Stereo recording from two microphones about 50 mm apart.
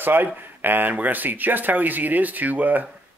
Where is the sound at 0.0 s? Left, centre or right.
Right.